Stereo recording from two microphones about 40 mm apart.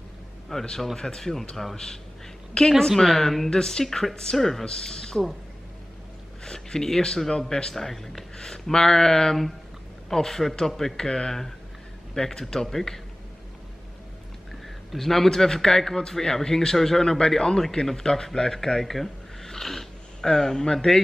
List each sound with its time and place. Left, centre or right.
0.5 s a woman's voice: centre
3.4 s speech: centre
6.4 s speech: centre
10.7 s speech: centre
11.0 s speech: centre
15.0 s speech: centre